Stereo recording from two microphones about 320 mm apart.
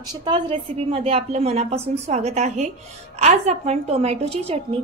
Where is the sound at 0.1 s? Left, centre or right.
Centre.